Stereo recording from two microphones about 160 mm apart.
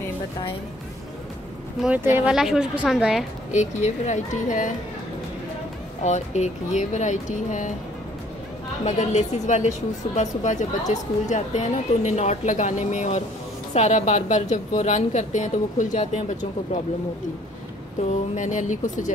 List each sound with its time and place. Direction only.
1.8 s a woman's voice: 10° right (ahead or behind)
3.5 s a woman's voice: 45° left (ahead or behind)
6.0 s a woman's voice: 45° left (ahead or behind)
8.8 s a woman's voice: 45° left (ahead or behind)
18.3 s a woman's voice: 50° left (ahead or behind)